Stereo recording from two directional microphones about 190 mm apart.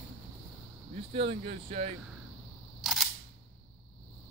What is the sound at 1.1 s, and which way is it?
Speech, 30° right (ahead or behind).